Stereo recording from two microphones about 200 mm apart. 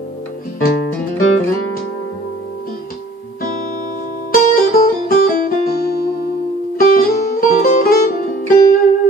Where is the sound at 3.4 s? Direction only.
45° left (ahead or behind).